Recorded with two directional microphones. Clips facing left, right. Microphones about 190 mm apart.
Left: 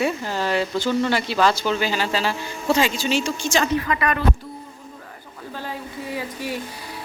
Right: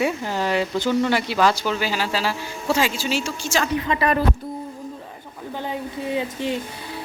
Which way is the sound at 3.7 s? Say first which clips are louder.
Right 1 dB; 25° right (ahead or behind).